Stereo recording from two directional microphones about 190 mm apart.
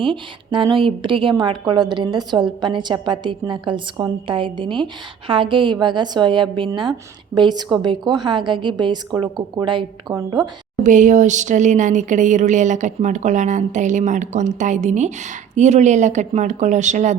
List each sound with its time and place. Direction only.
0.0 s a woman's voice: 25° right (ahead or behind)
10.8 s speech: 40° right (ahead or behind)